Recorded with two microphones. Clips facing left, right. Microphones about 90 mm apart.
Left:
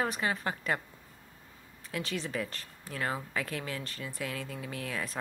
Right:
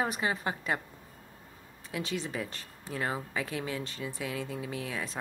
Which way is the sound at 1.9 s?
5° right (ahead or behind).